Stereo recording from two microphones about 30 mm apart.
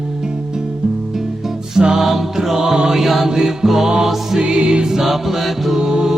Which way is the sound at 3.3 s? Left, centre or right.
Centre.